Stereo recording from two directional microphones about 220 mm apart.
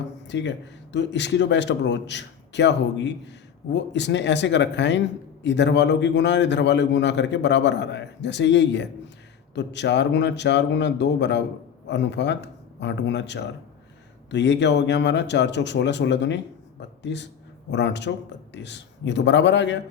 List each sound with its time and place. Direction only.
0.3 s a man's voice: 55° left (ahead or behind)